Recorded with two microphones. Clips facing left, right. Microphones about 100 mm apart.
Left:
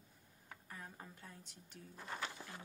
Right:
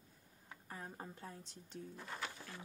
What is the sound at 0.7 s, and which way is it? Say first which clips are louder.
A woman's voice: right 4 dB; 30° right (ahead or behind).